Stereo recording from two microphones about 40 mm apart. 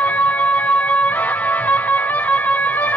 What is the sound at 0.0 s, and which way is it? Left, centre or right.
Music, left.